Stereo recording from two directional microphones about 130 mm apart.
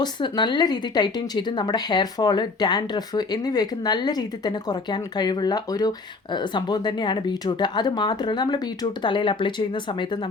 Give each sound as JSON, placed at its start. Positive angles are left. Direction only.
{"t": 0.0, "sound": "a woman's voice", "side_deg": 35}